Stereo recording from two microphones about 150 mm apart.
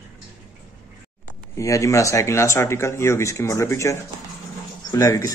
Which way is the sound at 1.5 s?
20° left (ahead or behind).